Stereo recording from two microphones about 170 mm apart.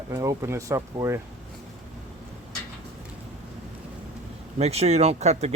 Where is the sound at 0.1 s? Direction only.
20° right (ahead or behind).